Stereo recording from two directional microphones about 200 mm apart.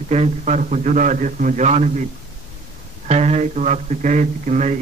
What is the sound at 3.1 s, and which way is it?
A man's voice, 35° right (ahead or behind).